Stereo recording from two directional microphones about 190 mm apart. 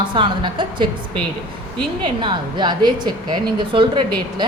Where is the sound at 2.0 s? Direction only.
25° right (ahead or behind).